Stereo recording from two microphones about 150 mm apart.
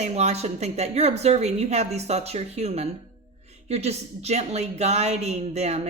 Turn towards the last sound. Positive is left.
turn(degrees=-45)  # may be behind; listen again after turning